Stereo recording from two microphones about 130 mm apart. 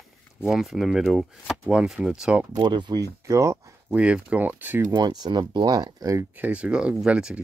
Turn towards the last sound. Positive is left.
turn(degrees=-10)  # may be behind; listen again after turning